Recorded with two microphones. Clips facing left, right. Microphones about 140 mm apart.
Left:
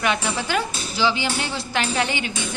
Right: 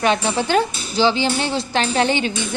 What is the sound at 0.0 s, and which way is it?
A woman's voice, 30° right (ahead or behind).